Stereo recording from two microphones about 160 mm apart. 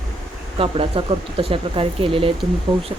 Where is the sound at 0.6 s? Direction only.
35° right (ahead or behind).